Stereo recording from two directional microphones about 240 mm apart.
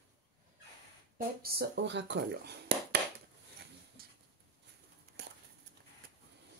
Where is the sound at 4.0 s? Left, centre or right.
Right.